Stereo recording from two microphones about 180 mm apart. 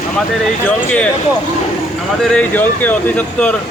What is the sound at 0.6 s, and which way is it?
Speech, 5° left (ahead or behind).